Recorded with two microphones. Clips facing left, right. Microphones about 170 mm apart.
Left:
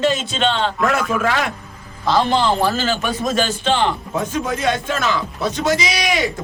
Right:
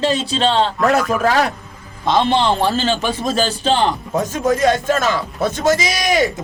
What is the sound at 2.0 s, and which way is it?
A man's voice, 25° right (ahead or behind).